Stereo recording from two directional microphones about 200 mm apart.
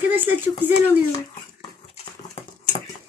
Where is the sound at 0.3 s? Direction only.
10° right (ahead or behind).